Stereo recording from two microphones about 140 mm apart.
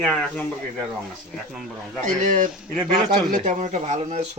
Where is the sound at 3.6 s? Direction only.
50° right (ahead or behind).